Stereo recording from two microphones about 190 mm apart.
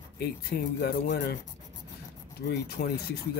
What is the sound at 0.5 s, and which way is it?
Speech, 50° left (ahead or behind).